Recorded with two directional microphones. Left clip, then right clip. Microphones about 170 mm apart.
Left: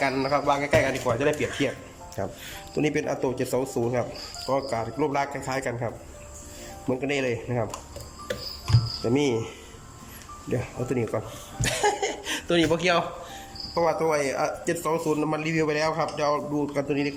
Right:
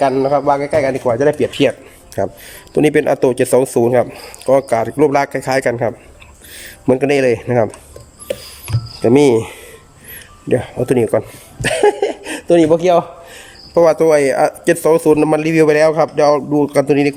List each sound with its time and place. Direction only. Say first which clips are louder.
0.2 s a man's voice: right 10 dB; 35° right (ahead or behind)
1.4 s speech: right 13 dB; 70° right (ahead or behind)
2.2 s speech: right 13 dB; 45° right (ahead or behind); by 5.9 s 75° right (ahead or behind)
6.8 s speech: right 14 dB; 90° right
9.0 s speech: right 15 dB; 65° right (ahead or behind)
10.5 s speech: right 14 dB; 60° right (ahead or behind); by 11.2 s 75° right (ahead or behind)
11.6 s speech: right 11 dB; 55° right (ahead or behind); by 13.1 s 35° right (ahead or behind)
13.7 s speech: right 13 dB; 75° right (ahead or behind); by 17.2 s 90° right